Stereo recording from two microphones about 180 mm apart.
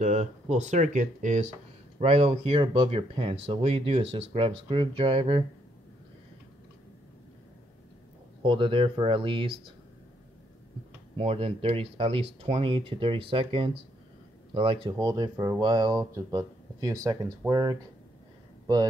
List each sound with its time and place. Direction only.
0.0 s speech: 40° right (ahead or behind)
8.4 s speech: 30° right (ahead or behind)
11.1 s speech: 30° right (ahead or behind)